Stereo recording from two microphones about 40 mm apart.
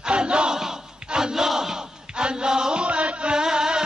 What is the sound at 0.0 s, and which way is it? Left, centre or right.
Battle cry, right.